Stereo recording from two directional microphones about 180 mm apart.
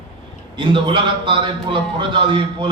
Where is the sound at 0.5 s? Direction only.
25° right (ahead or behind).